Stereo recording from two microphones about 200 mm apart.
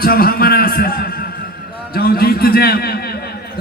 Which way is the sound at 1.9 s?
50° left (ahead or behind).